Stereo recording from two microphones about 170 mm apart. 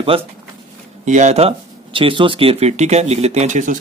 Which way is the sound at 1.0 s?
45° right (ahead or behind).